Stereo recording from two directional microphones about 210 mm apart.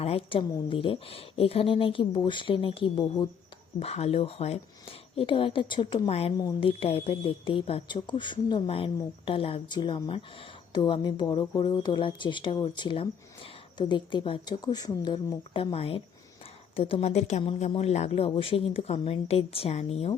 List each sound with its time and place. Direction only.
0.0 s speech: 30° left (ahead or behind)